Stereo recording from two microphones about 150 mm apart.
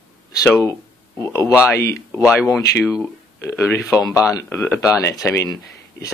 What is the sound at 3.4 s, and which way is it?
Speech, 15° left (ahead or behind).